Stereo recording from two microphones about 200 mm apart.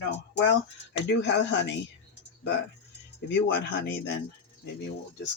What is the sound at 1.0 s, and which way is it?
Speech, 60° left (ahead or behind).